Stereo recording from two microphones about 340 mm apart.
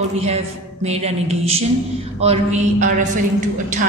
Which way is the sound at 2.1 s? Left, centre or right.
Centre.